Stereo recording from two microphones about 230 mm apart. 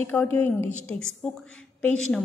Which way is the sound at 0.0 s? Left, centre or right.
Centre.